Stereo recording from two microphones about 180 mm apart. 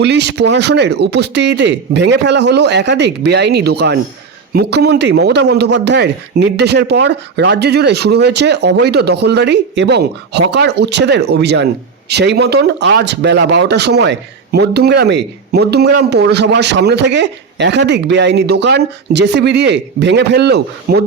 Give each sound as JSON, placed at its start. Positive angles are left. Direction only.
{"t": 0.0, "sound": "speech", "side_deg": -70}